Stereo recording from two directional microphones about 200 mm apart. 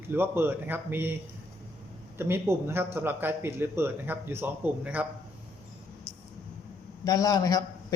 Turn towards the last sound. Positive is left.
turn(degrees=20)  # may be behind; listen again after turning